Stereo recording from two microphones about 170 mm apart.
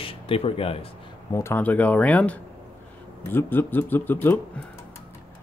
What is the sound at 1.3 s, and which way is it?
Speech, 15° left (ahead or behind).